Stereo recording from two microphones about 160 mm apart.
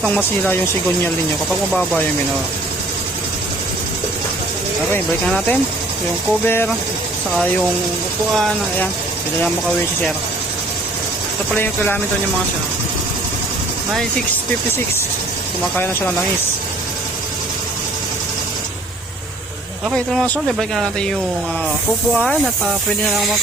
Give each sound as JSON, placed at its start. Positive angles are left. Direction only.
{"t": 0.0, "sound": "speech", "side_deg": 10}
{"t": 4.9, "sound": "speech", "side_deg": 10}
{"t": 11.5, "sound": "speech", "side_deg": 10}
{"t": 15.7, "sound": "speech", "side_deg": 10}
{"t": 20.1, "sound": "speech", "side_deg": 5}